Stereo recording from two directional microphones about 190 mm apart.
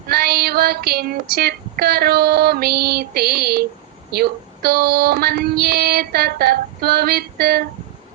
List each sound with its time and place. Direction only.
0.1 s child singing: 55° right (ahead or behind)
4.1 s female singing: 55° right (ahead or behind)